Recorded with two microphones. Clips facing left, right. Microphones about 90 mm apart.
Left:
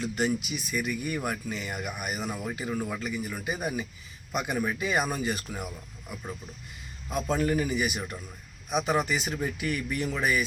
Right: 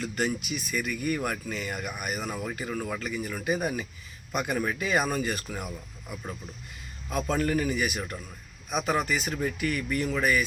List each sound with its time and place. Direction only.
0.0 s speech: 20° left (ahead or behind)